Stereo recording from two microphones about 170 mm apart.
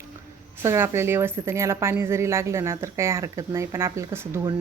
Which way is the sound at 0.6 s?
15° right (ahead or behind).